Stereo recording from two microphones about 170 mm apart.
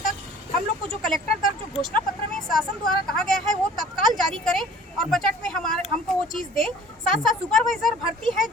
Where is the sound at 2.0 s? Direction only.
5° left (ahead or behind).